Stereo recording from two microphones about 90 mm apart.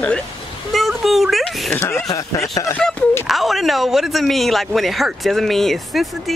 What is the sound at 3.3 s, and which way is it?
A man's voice, centre (ahead or behind).